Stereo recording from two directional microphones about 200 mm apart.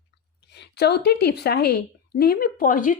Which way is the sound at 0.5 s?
55° left (ahead or behind).